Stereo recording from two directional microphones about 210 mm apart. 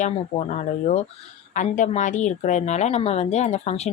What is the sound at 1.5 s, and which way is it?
Speech, 35° left (ahead or behind).